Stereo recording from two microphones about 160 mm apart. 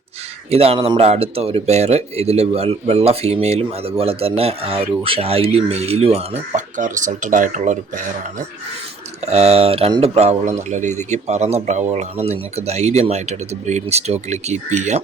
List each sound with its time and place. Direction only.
0.5 s speech: 40° right (ahead or behind)
6.5 s a man's voice: 50° right (ahead or behind)